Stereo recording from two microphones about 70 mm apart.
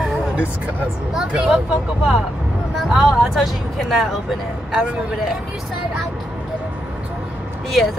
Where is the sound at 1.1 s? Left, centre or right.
Centre.